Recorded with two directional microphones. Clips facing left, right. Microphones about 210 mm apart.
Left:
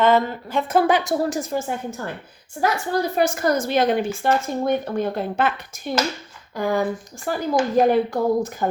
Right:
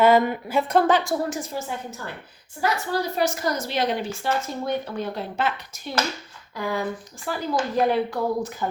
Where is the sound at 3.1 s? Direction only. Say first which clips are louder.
Left 4 dB; 55° left (ahead or behind).